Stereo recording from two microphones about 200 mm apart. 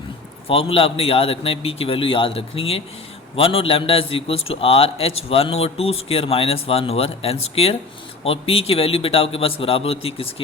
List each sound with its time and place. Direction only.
0.4 s a man's voice: 30° left (ahead or behind)